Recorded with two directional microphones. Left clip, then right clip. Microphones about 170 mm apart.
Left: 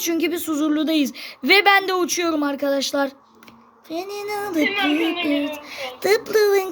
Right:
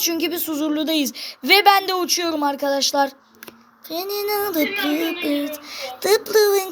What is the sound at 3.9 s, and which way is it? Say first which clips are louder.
Child singing: right 4 dB; 10° left (ahead or behind).